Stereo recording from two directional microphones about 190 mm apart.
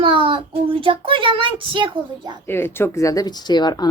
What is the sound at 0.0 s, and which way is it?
Speech, 25° right (ahead or behind).